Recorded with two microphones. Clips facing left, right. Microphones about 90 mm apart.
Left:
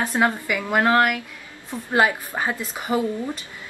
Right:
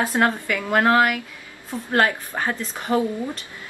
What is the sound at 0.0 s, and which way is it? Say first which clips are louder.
A woman's voice: right 1 dB; 5° right (ahead or behind).